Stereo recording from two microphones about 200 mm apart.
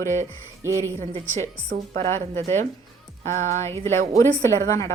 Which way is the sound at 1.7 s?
35° right (ahead or behind).